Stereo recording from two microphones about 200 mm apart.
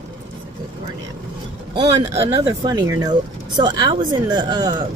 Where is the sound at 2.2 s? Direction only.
15° right (ahead or behind).